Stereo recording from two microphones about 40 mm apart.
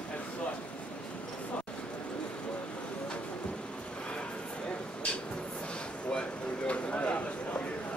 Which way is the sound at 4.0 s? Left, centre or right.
Left.